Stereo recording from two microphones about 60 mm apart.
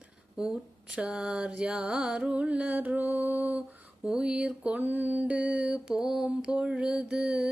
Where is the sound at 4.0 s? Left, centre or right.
Centre.